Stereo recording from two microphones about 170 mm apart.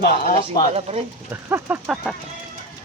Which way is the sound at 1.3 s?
15° right (ahead or behind).